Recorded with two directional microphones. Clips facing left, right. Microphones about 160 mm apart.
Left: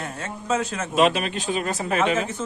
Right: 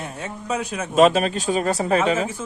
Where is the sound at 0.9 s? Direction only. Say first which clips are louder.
Right 5 dB; 40° right (ahead or behind).